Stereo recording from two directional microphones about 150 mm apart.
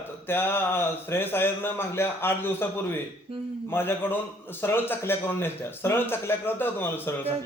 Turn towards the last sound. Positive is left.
turn(degrees=15)  # may be behind; listen again after turning